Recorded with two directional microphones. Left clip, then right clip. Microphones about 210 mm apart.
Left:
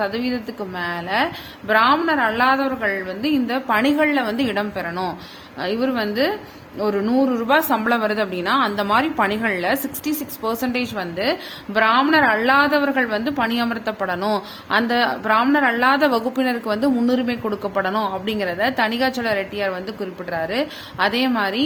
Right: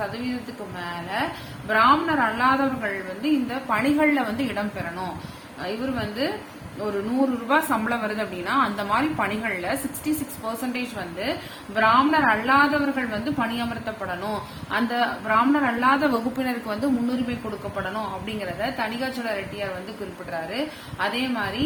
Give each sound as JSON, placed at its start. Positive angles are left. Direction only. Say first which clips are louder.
{"t": 0.8, "sound": "a woman's voice", "louder": "left 7 dB", "side_deg": 50}
{"t": 7.4, "sound": "a woman's voice", "louder": "left 3 dB", "side_deg": 50}
{"t": 21.0, "sound": "a woman's voice", "louder": "left 6 dB", "side_deg": 50}